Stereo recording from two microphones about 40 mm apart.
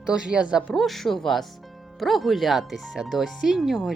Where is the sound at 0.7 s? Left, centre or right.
Centre.